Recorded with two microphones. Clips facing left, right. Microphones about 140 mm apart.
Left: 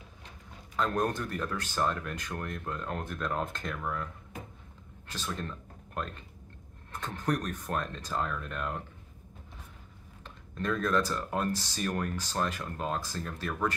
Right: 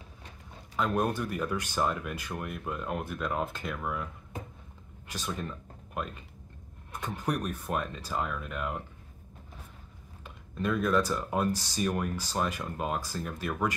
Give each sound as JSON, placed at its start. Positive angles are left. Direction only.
{"t": 0.7, "sound": "speech", "side_deg": -10}
{"t": 10.2, "sound": "speech", "side_deg": -10}